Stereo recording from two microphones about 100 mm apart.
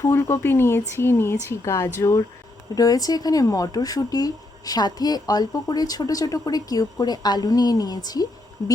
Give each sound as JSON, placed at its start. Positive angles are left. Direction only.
{"t": 0.1, "sound": "a woman's voice", "side_deg": 25}